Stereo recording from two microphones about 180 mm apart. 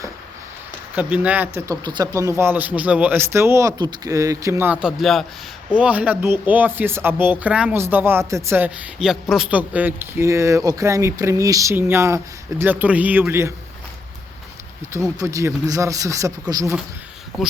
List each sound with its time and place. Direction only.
0.9 s speech: 10° right (ahead or behind)
2.4 s speech: 10° right (ahead or behind)
14.9 s speech: 15° right (ahead or behind)
17.4 s speech: centre (ahead or behind)